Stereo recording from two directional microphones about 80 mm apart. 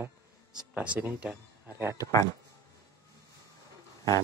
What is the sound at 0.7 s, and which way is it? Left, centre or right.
Speech, centre.